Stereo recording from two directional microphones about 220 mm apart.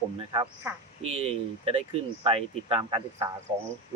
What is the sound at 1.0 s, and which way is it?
Speech, 30° right (ahead or behind).